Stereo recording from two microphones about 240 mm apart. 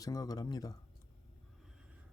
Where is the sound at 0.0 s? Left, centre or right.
Centre.